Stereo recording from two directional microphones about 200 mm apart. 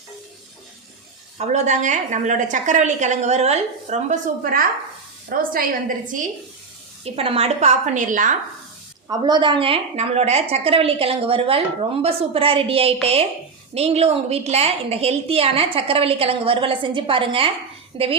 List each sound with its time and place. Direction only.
1.4 s a woman's voice: 35° right (ahead or behind)
7.0 s a woman's voice: 30° right (ahead or behind)
9.0 s a woman's voice: 20° right (ahead or behind)